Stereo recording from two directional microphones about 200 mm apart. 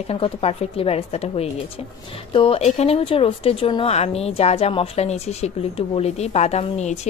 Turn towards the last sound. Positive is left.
turn(degrees=35)  # may be behind; listen again after turning